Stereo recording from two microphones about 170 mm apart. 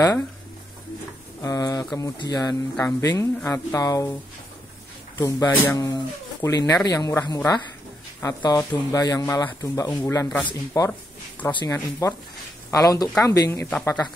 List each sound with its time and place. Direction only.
1.4 s speech: 20° left (ahead or behind)